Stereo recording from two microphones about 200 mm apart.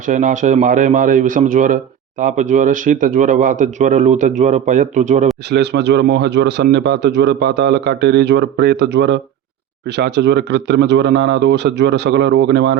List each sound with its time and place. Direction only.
0.0 s a man's voice: 40° right (ahead or behind)
5.5 s speech: 55° right (ahead or behind)